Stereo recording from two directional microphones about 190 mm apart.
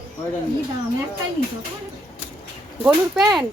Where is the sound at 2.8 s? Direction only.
5° right (ahead or behind).